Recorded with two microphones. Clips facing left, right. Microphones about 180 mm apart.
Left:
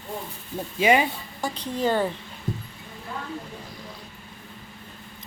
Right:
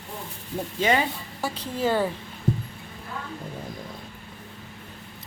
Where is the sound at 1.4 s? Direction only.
5° right (ahead or behind).